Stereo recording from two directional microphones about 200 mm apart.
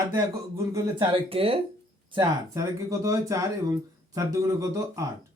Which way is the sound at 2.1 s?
15° right (ahead or behind).